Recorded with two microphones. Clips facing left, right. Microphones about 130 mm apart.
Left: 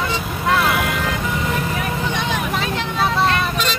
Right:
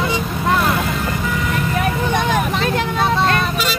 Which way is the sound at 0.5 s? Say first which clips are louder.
Even; 5° left (ahead or behind).